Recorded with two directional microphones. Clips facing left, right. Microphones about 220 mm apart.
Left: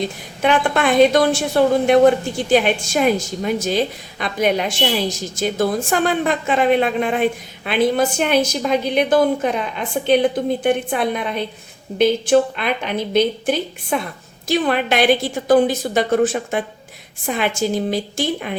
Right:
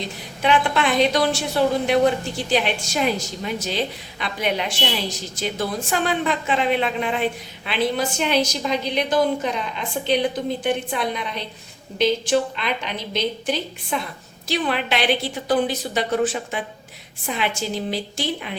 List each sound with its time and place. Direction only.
0.4 s a woman's voice: 50° left (ahead or behind)